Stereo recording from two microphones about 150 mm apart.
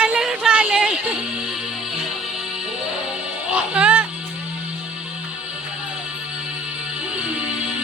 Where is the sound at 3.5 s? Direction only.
10° right (ahead or behind).